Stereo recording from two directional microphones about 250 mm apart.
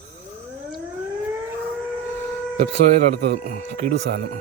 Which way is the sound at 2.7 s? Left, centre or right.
Right.